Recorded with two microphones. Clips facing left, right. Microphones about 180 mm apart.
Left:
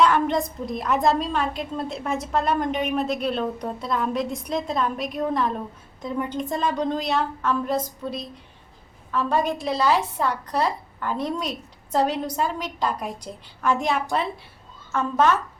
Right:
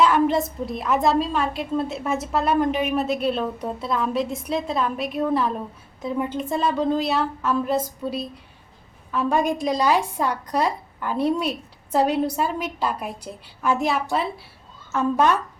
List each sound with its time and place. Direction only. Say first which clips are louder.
0.0 s a woman's voice: right 1 dB; 5° right (ahead or behind)